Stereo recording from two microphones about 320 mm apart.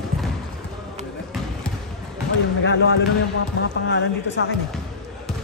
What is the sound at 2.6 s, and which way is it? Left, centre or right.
Speech, left.